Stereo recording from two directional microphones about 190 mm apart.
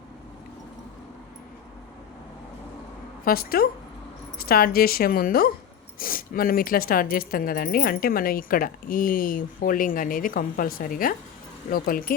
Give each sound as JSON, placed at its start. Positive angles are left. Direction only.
{"t": 3.2, "sound": "speech", "side_deg": 50}